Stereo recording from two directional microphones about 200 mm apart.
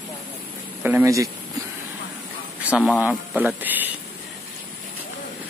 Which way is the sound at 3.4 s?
10° right (ahead or behind).